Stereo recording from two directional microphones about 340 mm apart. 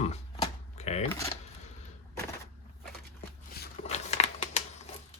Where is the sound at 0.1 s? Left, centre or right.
Centre.